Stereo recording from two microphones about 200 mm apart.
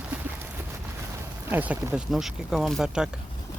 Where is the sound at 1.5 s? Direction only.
10° right (ahead or behind).